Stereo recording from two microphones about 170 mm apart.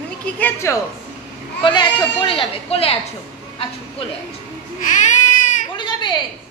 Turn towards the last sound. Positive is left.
turn(degrees=25)  # may be behind; listen again after turning